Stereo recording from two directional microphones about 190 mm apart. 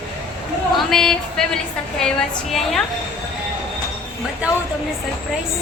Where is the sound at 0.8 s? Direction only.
Centre (ahead or behind).